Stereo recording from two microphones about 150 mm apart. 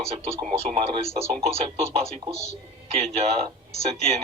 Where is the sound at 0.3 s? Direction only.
50° right (ahead or behind).